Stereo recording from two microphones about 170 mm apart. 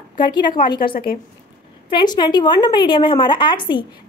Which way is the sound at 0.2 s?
25° left (ahead or behind).